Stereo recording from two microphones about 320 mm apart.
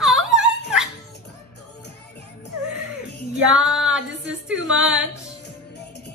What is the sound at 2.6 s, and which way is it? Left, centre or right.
Music, left.